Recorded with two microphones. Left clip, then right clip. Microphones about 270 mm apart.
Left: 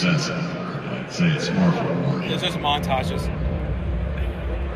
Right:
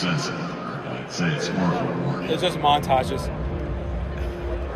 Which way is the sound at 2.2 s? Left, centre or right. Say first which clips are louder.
Right 5 dB; right.